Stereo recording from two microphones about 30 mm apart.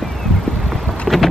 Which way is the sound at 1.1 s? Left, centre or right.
Centre.